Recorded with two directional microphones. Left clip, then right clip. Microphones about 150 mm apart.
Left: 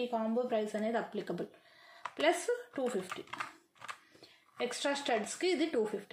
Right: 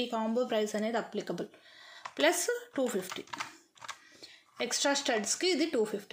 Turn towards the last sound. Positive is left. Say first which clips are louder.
# right 2 dB
turn(degrees=-35)  # may be behind; listen again after turning